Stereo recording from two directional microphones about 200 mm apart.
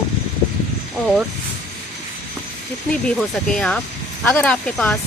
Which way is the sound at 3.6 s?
5° left (ahead or behind).